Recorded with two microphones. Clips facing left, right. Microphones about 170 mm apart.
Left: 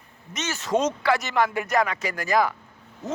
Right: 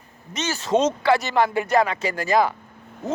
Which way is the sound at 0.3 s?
30° right (ahead or behind).